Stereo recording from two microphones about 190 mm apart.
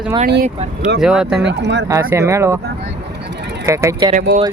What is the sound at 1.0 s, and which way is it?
Speech, 5° right (ahead or behind).